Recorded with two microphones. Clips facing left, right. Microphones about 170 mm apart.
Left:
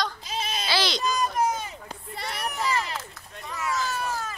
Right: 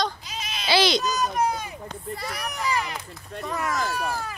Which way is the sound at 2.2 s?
25° left (ahead or behind).